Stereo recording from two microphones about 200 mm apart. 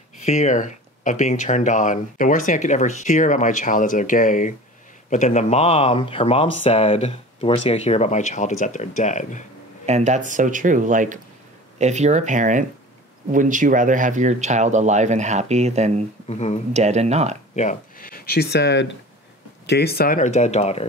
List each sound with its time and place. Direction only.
0.2 s speech: 35° left (ahead or behind)
9.8 s speech: 35° right (ahead or behind)
16.3 s speech: 35° left (ahead or behind)
16.7 s speech: 35° right (ahead or behind)
17.6 s speech: 40° left (ahead or behind)